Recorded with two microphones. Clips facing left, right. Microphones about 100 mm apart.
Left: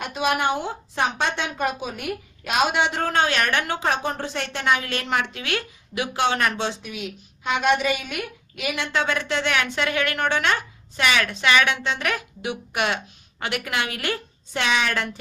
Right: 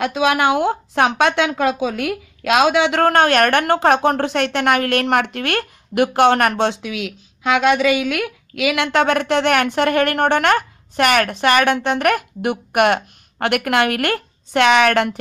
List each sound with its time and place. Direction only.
0.0 s speech: 90° right; by 15.1 s 65° right (ahead or behind)